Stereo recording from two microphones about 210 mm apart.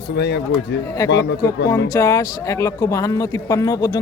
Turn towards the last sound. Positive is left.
turn(degrees=15)  # may be behind; listen again after turning